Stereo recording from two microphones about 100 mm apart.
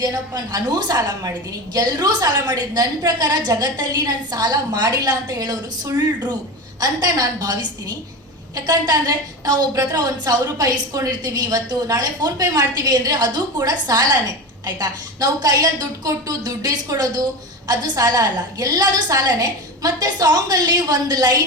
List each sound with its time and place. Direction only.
0.0 s a woman's voice: 40° right (ahead or behind)